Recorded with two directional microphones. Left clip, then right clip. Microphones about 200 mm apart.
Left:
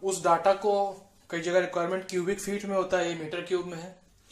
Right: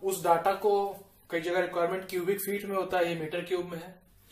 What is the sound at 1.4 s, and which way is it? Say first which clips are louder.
Speech: left 3 dB; 20° left (ahead or behind).